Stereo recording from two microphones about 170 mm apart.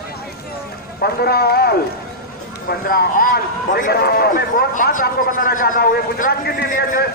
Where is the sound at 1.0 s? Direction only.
65° left (ahead or behind).